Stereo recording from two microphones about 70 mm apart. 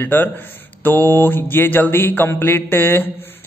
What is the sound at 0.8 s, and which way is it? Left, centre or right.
Mantra, left.